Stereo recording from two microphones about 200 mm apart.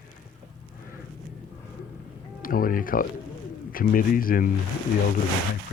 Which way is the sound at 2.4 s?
45° left (ahead or behind).